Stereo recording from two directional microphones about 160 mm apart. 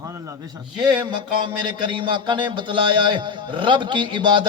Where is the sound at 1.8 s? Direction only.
30° right (ahead or behind).